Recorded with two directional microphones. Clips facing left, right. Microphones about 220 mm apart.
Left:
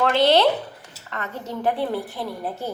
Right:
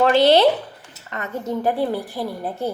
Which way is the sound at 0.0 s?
15° right (ahead or behind).